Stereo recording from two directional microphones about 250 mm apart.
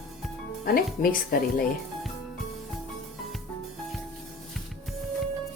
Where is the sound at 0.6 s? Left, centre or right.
Left.